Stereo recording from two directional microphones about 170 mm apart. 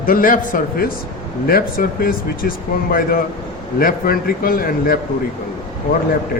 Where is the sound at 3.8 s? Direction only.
60° left (ahead or behind).